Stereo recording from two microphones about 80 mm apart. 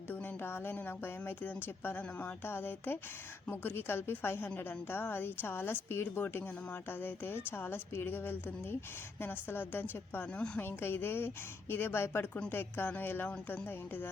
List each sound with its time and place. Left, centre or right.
0.1 s a woman's voice: left